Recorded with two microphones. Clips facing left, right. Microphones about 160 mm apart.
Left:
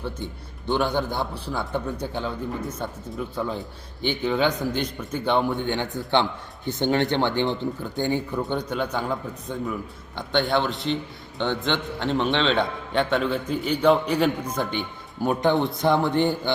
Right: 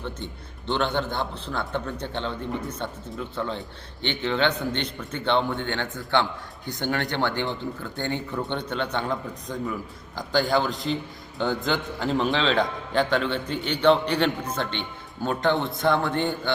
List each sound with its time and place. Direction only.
0.7 s a man's voice: 10° left (ahead or behind)